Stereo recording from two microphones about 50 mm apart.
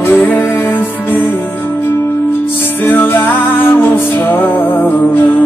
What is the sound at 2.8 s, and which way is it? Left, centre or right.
Music, left.